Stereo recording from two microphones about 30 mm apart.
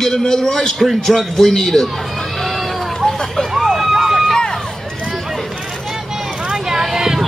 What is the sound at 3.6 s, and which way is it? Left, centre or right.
Vehicle, centre.